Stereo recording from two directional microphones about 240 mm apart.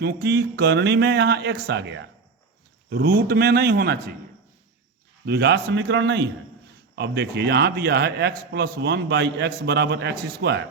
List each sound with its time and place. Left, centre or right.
0.0 s a man's voice: right
5.2 s a man's voice: right